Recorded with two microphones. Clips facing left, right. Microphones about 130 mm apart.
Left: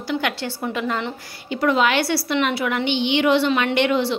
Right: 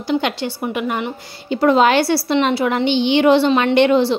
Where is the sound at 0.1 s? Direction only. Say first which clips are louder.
Right 5 dB; 20° right (ahead or behind).